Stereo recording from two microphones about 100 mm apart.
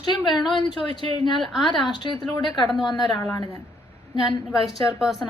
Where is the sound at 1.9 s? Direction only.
45° left (ahead or behind).